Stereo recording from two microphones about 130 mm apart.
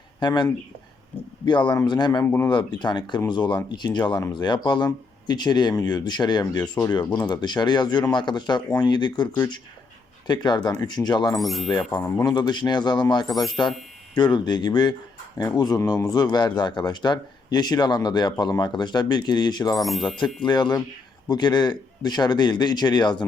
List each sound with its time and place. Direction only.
0.2 s speech: 35° left (ahead or behind)
1.5 s speech: 35° left (ahead or behind)
2.2 s speech: 15° left (ahead or behind)
2.5 s speech: 35° left (ahead or behind)
6.6 s speech: 20° left (ahead or behind)
7.1 s speech: 35° left (ahead or behind)
11.3 s speech: centre (ahead or behind)
12.2 s speech: 35° left (ahead or behind)
19.8 s speech: centre (ahead or behind)
20.1 s speech: 35° left (ahead or behind)